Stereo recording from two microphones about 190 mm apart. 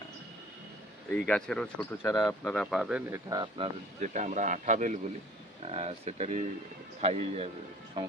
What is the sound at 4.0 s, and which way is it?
Speech, 40° right (ahead or behind).